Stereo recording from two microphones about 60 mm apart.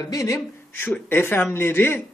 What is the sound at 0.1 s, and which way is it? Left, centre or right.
Speech, left.